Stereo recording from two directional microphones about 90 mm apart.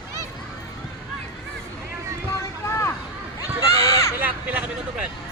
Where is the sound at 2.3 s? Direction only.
30° left (ahead or behind).